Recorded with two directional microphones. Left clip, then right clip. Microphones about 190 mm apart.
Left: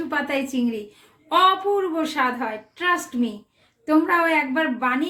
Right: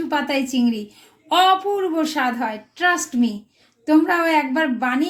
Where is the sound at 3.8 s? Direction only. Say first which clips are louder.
Right 2 dB; 50° right (ahead or behind).